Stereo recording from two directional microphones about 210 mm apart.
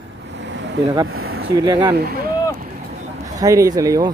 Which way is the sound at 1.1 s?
80° right.